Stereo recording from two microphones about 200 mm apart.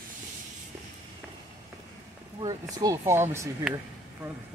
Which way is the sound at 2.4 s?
15° right (ahead or behind).